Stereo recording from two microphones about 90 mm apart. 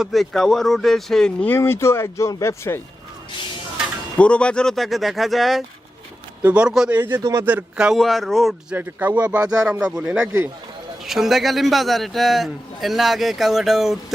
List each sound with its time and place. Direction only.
0.0 s a man's voice: centre (ahead or behind)
1.5 s speech: 25° left (ahead or behind)
4.2 s a man's voice: 10° left (ahead or behind)
6.4 s speech: 15° right (ahead or behind)
6.9 s speech: 25° right (ahead or behind)
7.2 s a man's voice: 45° right (ahead or behind)
7.4 s speech: 15° right (ahead or behind)
7.9 s a man's voice: centre (ahead or behind)
8.7 s a man's voice: 20° right (ahead or behind); by 13.9 s 5° right (ahead or behind)